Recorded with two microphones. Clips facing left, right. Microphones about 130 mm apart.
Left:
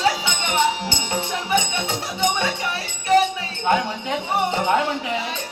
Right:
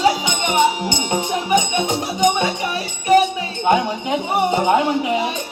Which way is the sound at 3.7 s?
15° right (ahead or behind).